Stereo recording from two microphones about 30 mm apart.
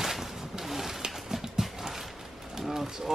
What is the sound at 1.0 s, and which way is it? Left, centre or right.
Horse, centre.